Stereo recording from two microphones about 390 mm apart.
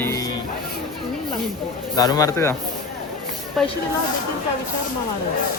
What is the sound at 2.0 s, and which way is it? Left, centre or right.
Speech, centre.